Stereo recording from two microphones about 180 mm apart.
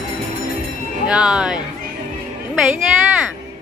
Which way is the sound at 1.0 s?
5° right (ahead or behind).